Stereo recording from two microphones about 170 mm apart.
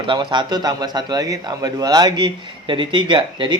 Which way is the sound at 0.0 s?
25° right (ahead or behind).